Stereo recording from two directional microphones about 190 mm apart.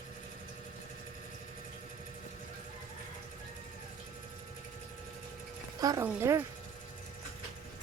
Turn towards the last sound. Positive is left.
turn(degrees=-15)  # may be behind; listen again after turning